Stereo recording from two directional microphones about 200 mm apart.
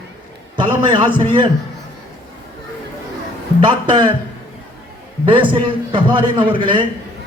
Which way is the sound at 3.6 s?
25° right (ahead or behind).